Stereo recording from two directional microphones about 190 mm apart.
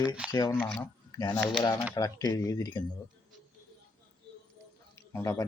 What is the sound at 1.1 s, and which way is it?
Speech, 20° left (ahead or behind).